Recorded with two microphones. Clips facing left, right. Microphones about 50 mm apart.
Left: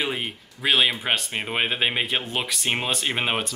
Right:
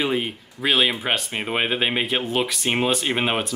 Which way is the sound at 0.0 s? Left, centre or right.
Centre.